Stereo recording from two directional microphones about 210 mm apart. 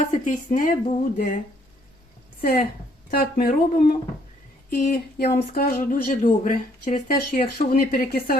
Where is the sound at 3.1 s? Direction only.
45° left (ahead or behind).